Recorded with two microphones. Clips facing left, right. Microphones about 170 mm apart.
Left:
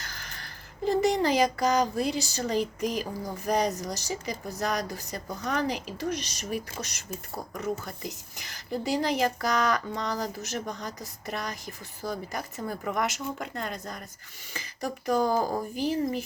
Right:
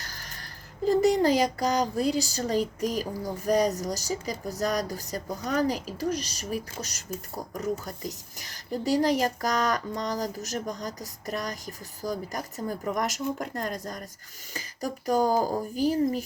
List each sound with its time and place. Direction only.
0.0 s speech: 40° right (ahead or behind)